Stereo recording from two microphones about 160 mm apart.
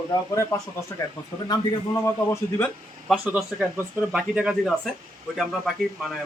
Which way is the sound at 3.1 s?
Centre (ahead or behind).